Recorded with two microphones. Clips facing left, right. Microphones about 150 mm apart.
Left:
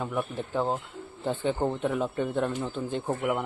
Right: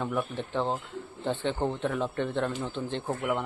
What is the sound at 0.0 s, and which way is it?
A man's voice, 10° left (ahead or behind).